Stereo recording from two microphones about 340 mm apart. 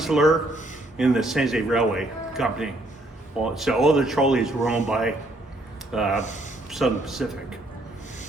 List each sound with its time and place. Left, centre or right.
0.0 s a man's voice: centre
6.1 s speech: left
6.7 s a man's voice: centre